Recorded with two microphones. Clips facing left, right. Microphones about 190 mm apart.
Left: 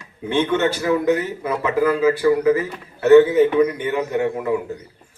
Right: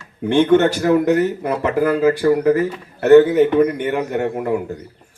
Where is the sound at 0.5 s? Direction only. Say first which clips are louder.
Right 6 dB; 50° right (ahead or behind).